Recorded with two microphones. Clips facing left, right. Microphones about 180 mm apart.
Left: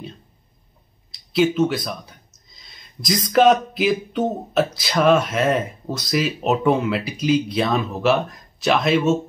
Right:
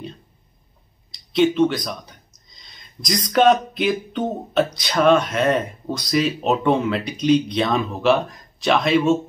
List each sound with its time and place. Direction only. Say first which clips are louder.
1.1 s speech: right 1 dB; 5° left (ahead or behind)